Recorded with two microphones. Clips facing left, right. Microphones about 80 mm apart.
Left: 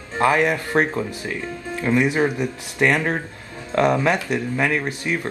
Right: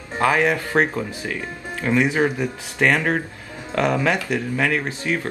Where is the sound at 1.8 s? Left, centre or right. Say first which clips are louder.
Even; left.